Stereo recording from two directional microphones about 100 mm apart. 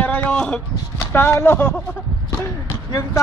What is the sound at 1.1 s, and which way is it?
Speech, 20° left (ahead or behind).